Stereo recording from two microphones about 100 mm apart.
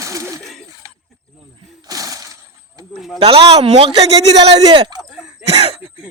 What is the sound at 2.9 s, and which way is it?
Speech, centre (ahead or behind).